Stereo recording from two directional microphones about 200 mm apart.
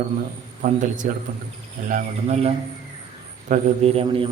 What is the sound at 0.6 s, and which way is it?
A man's voice, 40° right (ahead or behind).